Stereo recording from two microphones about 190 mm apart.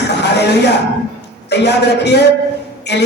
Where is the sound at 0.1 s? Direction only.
60° left (ahead or behind).